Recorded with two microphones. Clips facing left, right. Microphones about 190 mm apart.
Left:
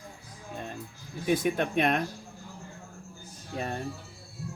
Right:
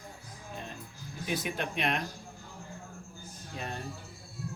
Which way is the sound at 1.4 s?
50° left (ahead or behind).